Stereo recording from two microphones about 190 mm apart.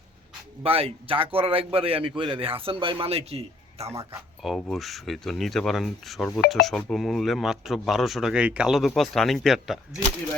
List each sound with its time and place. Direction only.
0.6 s a man's voice: 30° right (ahead or behind)
4.4 s speech: centre (ahead or behind)